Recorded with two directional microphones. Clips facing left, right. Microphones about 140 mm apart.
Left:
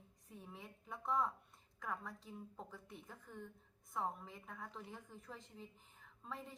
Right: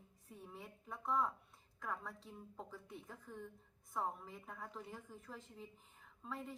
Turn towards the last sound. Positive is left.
turn(degrees=0)  # may be behind; listen again after turning